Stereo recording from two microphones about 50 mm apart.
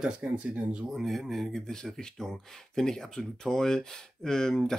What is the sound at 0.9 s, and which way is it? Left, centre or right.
Speech, centre.